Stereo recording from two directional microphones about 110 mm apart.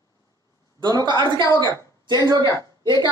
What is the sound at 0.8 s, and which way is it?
Speech, 40° right (ahead or behind).